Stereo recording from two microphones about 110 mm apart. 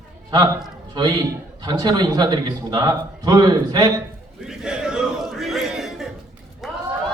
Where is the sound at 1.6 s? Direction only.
35° right (ahead or behind).